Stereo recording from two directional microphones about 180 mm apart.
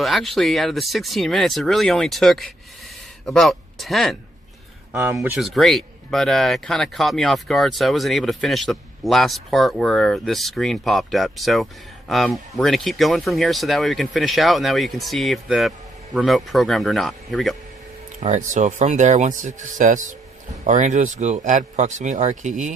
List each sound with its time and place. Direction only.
0.0 s speech: centre (ahead or behind)
4.9 s speech: 15° right (ahead or behind)
5.4 s speech: centre (ahead or behind)
18.2 s speech: 40° right (ahead or behind)